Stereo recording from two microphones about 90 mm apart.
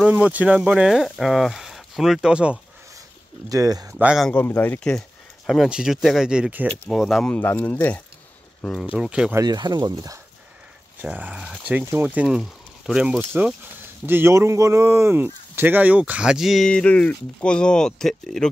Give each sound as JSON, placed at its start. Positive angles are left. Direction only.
{"t": 0.0, "sound": "speech", "side_deg": -15}
{"t": 3.4, "sound": "speech", "side_deg": -40}
{"t": 4.3, "sound": "speech", "side_deg": 25}
{"t": 4.7, "sound": "speech", "side_deg": 5}
{"t": 5.7, "sound": "speech", "side_deg": -5}
{"t": 7.2, "sound": "speech", "side_deg": 20}
{"t": 8.9, "sound": "speech", "side_deg": -10}
{"t": 9.4, "sound": "speech", "side_deg": -50}
{"t": 11.0, "sound": "speech", "side_deg": -15}
{"t": 12.4, "sound": "speech", "side_deg": -5}
{"t": 13.2, "sound": "speech", "side_deg": -20}
{"t": 16.6, "sound": "speech", "side_deg": 10}